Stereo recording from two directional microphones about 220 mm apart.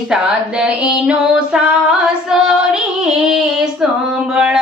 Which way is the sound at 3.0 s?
Centre (ahead or behind).